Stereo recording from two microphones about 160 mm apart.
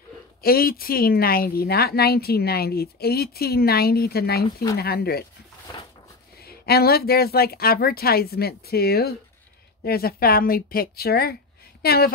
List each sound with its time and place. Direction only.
0.4 s speech: 65° left (ahead or behind)
6.4 s speech: 75° left (ahead or behind)